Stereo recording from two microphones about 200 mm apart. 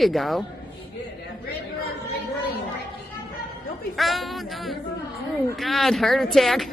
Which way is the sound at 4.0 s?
Centre (ahead or behind).